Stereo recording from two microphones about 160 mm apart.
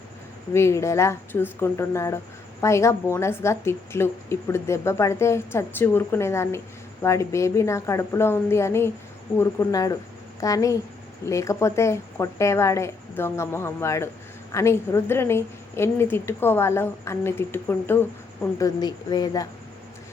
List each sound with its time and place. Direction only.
0.5 s speech: 15° left (ahead or behind)
18.6 s speech: 25° left (ahead or behind)